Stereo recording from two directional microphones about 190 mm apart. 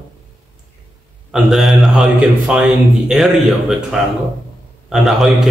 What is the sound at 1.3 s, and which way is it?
A man's voice, centre (ahead or behind).